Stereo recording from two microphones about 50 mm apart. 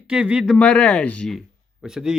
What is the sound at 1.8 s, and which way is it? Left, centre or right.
Speech, centre.